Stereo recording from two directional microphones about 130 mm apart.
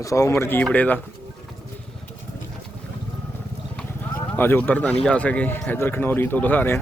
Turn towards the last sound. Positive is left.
turn(degrees=15)  # may be behind; listen again after turning